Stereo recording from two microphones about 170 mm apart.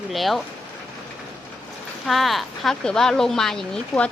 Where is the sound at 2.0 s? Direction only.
Centre (ahead or behind).